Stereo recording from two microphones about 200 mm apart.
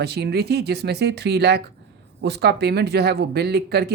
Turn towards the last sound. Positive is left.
turn(degrees=-55)  # may be behind; listen again after turning